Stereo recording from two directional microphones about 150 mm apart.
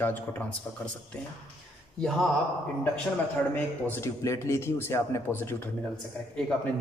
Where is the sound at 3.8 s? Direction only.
15° left (ahead or behind).